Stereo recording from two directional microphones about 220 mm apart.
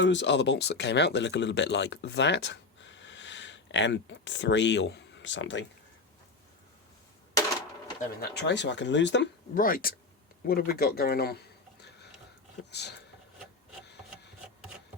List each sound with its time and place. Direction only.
0.0 s speech: 55° left (ahead or behind)
8.2 s speech: 50° left (ahead or behind)
9.6 s speech: 40° left (ahead or behind)